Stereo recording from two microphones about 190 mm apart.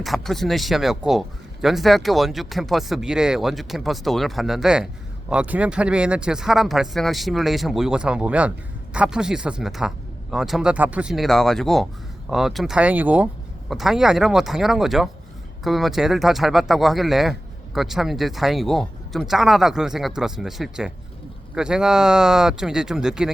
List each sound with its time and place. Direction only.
0.0 s speech: centre (ahead or behind)